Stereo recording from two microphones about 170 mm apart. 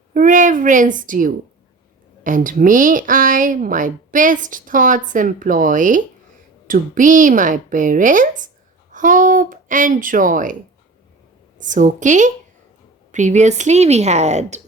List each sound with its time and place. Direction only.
0.1 s a woman's voice: 50° right (ahead or behind)